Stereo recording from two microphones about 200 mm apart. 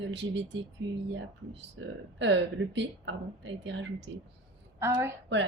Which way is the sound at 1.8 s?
75° right (ahead or behind).